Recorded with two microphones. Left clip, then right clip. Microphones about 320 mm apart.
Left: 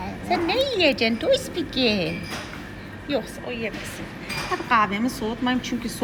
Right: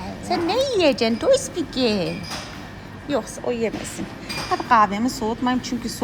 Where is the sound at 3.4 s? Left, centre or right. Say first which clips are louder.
Right 6 dB; right.